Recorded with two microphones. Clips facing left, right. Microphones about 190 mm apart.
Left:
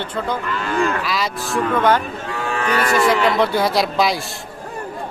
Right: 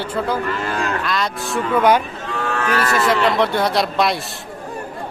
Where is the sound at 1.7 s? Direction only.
10° right (ahead or behind).